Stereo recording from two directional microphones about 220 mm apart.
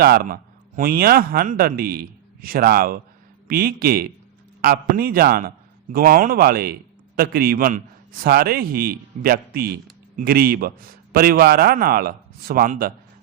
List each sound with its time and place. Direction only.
0.0 s a man's voice: 40° right (ahead or behind)